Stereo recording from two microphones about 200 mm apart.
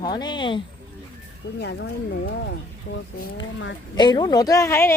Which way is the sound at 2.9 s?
45° left (ahead or behind).